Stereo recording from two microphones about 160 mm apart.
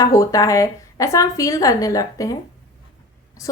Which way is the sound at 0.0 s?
20° left (ahead or behind).